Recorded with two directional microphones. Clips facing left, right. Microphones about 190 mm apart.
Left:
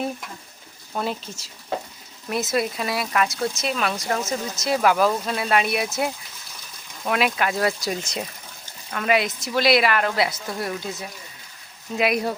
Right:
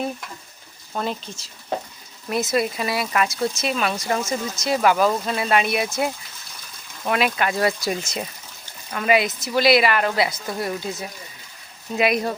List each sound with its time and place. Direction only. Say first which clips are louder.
0.9 s speech: even; 5° left (ahead or behind)
11.9 s speech: right 1 dB; centre (ahead or behind)